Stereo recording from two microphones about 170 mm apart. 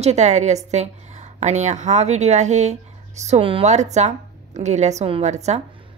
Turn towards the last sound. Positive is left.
turn(degrees=-40)  # may be behind; listen again after turning